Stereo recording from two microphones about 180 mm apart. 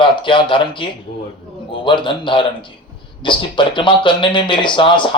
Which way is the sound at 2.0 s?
25° left (ahead or behind).